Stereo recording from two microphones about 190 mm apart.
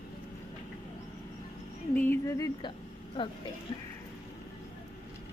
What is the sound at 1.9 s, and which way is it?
A woman's voice, 10° left (ahead or behind).